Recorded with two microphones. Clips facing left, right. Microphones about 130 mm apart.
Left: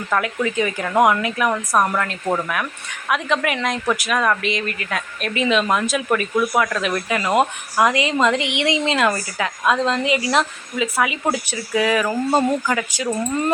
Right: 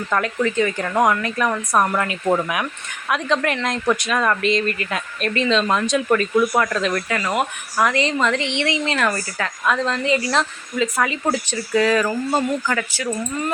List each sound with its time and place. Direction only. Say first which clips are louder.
0.1 s speech: even; 10° left (ahead or behind)
1.9 s speech: right 2 dB; 10° right (ahead or behind)
3.1 s speech: even; 5° left (ahead or behind)
12.3 s speech: left 2 dB; 20° left (ahead or behind)